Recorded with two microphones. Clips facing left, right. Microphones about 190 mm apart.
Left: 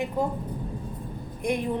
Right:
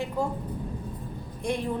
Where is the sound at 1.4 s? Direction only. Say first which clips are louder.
Left 2 dB; 15° left (ahead or behind).